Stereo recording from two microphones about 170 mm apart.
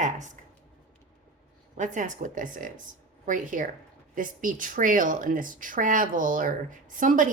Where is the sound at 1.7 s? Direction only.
45° right (ahead or behind).